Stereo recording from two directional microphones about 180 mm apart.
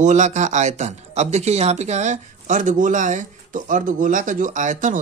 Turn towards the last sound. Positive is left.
turn(degrees=-45)  # may be behind; listen again after turning